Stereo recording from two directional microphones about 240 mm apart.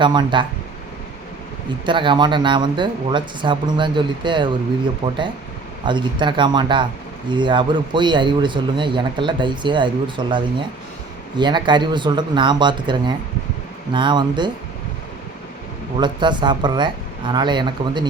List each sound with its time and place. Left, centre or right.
0.0 s a man's voice: centre
1.8 s a man's voice: centre
16.0 s a man's voice: centre